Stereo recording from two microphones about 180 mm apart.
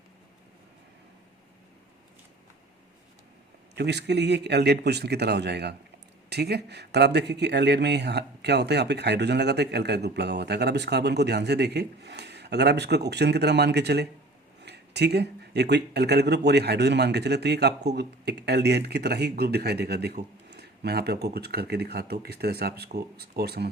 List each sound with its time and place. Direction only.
3.8 s speech: 70° right (ahead or behind)